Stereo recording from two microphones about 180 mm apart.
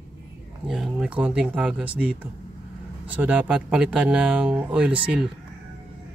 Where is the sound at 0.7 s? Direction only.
Centre (ahead or behind).